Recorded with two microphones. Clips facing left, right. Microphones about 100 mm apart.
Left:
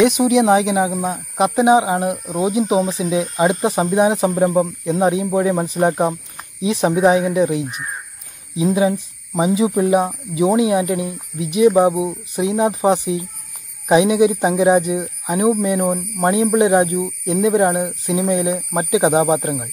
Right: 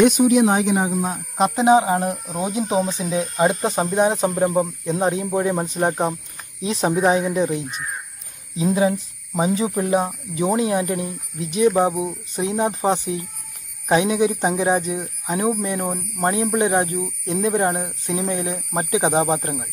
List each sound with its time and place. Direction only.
0.7 s speech: centre (ahead or behind)
6.7 s speech: centre (ahead or behind)
7.2 s speech: 15° left (ahead or behind)
8.7 s speech: 10° left (ahead or behind)
16.5 s speech: 20° left (ahead or behind)